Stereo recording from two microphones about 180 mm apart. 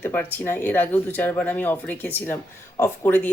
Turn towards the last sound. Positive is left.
turn(degrees=10)  # may be behind; listen again after turning